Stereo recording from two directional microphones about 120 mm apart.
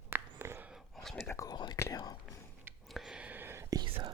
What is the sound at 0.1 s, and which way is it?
Whispering, 20° right (ahead or behind).